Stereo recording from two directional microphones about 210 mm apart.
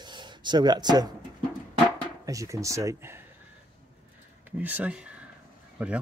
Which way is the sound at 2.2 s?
15° right (ahead or behind).